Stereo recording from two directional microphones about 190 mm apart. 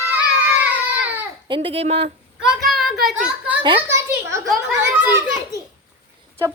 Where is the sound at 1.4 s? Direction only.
25° right (ahead or behind).